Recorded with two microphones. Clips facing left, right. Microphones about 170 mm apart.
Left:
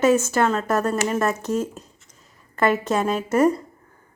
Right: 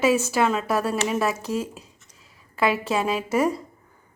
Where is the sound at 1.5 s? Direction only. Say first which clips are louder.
Left 3 dB; 40° left (ahead or behind).